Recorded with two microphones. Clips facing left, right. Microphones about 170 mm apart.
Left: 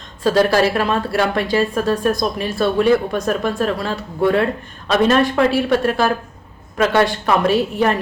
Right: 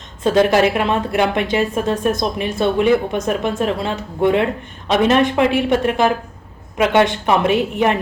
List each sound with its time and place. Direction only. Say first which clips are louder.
0.2 s a woman's voice: right 1 dB; 20° right (ahead or behind)